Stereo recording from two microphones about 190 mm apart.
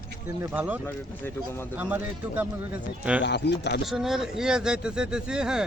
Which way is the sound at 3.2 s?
65° left (ahead or behind).